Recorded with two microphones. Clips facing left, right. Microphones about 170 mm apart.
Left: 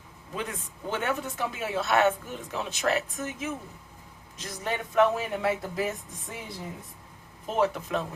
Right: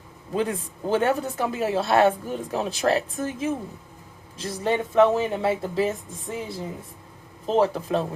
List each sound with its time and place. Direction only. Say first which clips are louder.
0.3 s speech: right 9 dB; 35° right (ahead or behind)
7.4 s speech: right 5 dB; 30° right (ahead or behind)